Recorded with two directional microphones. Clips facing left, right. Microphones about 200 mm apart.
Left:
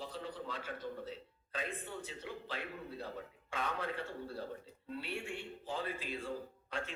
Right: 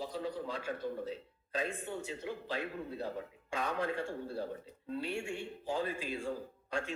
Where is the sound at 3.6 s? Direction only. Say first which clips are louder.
Right 4 dB; 10° right (ahead or behind).